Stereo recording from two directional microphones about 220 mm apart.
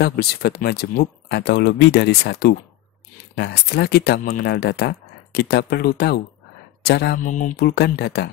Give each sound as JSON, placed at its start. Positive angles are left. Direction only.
{"t": 0.0, "sound": "speech", "side_deg": 45}
{"t": 6.8, "sound": "mantra", "side_deg": 45}
{"t": 7.2, "sound": "speech", "side_deg": 35}